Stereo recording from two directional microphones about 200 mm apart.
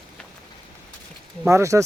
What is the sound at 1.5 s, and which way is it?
Speech, 15° right (ahead or behind).